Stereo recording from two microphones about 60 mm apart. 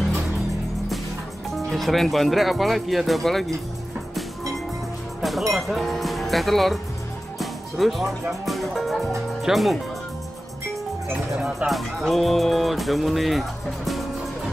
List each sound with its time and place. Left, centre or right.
1.7 s speech: centre
5.5 s speech: centre
11.3 s speech: centre
11.7 s speech: centre